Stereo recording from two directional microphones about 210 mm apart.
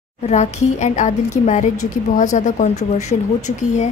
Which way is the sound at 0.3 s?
35° left (ahead or behind).